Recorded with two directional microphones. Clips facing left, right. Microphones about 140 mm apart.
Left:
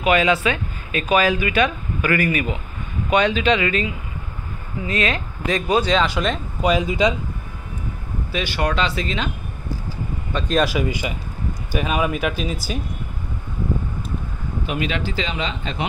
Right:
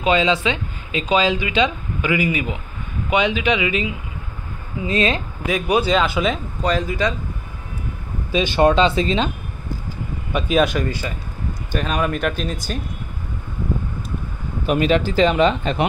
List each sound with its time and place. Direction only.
0.0 s speech: 25° right (ahead or behind)
4.8 s speech: 25° right (ahead or behind)
5.5 s speech: 5° right (ahead or behind)
6.6 s speech: 10° left (ahead or behind)
8.3 s speech: 20° right (ahead or behind)
10.3 s speech: centre (ahead or behind)
10.9 s speech: 15° left (ahead or behind)
14.7 s speech: 45° right (ahead or behind)